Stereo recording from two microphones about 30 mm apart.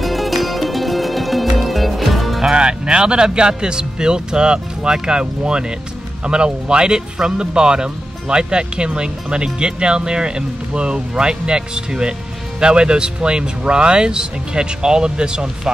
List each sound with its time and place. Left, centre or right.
0.0 s music: centre
2.5 s speech: right